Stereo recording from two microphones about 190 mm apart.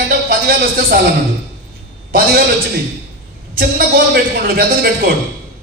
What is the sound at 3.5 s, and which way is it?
Speech, 50° right (ahead or behind).